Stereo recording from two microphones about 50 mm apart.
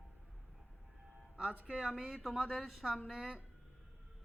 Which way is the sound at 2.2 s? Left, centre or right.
Centre.